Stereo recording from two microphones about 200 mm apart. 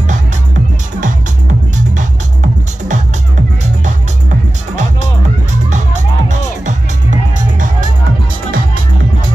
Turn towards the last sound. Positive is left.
turn(degrees=-40)  # may be behind; listen again after turning